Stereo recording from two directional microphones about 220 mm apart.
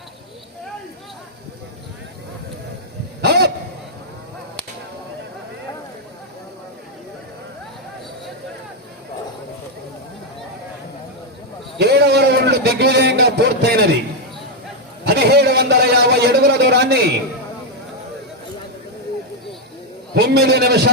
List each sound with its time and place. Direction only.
3.2 s honk: 50° right (ahead or behind)
11.8 s a man's voice: 50° right (ahead or behind)
15.0 s a man's voice: 50° right (ahead or behind)
20.1 s a man's voice: 50° right (ahead or behind)